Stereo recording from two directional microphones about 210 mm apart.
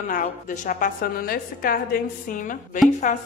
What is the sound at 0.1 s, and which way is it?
A woman's voice, 40° left (ahead or behind).